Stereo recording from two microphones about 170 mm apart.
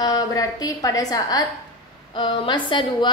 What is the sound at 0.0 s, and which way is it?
A woman's voice, 20° left (ahead or behind).